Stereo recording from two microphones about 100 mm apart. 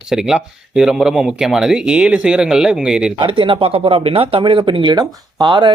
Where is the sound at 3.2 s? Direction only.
60° right (ahead or behind).